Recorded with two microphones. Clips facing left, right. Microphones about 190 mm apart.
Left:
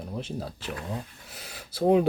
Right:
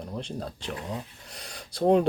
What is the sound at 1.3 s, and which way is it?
Speech, 5° left (ahead or behind).